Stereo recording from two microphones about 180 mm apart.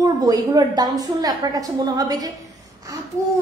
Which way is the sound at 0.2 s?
20° right (ahead or behind).